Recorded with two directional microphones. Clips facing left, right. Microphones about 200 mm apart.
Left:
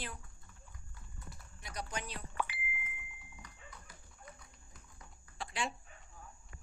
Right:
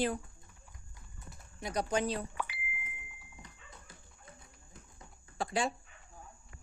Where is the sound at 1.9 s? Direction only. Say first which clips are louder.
Right 14 dB; 30° right (ahead or behind).